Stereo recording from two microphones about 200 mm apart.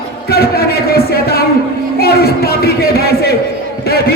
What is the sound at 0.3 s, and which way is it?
A man's voice, 50° left (ahead or behind).